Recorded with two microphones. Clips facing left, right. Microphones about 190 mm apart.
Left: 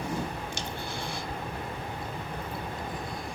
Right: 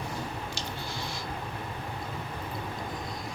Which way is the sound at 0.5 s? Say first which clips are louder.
Left 1 dB; 55° left (ahead or behind).